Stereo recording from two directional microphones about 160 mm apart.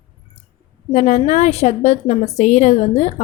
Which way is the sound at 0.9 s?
50° left (ahead or behind).